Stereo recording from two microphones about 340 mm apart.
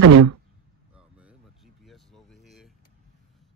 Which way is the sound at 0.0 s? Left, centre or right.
Right.